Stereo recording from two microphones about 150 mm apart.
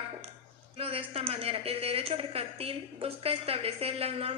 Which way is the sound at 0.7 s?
40° right (ahead or behind).